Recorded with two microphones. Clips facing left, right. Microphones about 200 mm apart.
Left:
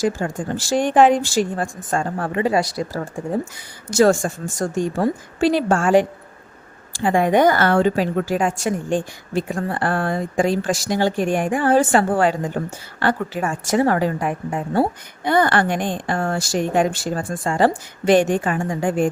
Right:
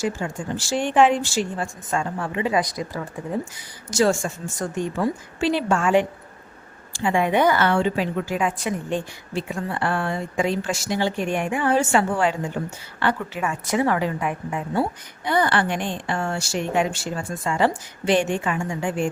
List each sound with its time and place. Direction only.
0.2 s a woman's voice: 40° left (ahead or behind)
3.9 s a woman's voice: 50° left (ahead or behind)
4.6 s a woman's voice: 35° left (ahead or behind)
18.6 s a woman's voice: 35° left (ahead or behind)